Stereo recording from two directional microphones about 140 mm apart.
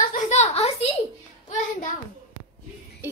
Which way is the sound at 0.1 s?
55° left (ahead or behind).